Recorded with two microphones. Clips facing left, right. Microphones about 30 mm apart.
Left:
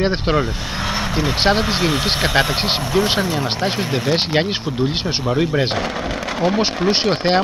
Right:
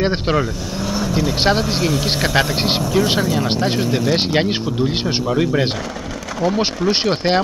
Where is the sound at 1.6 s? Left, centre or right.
Left.